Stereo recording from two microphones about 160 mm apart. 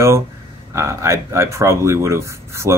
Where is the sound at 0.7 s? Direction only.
15° right (ahead or behind).